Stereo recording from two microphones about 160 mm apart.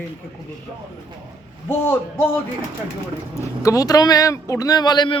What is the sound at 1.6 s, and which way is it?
Speech, 15° left (ahead or behind).